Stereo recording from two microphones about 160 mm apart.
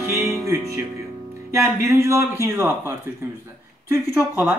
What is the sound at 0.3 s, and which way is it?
Music, 15° right (ahead or behind).